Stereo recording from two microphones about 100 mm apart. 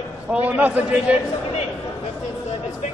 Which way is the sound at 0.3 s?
15° right (ahead or behind).